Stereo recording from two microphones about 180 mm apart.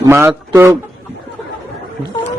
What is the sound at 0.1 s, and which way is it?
Speech, 15° right (ahead or behind).